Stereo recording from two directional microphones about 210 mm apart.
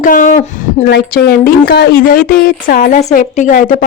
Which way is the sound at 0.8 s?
50° left (ahead or behind).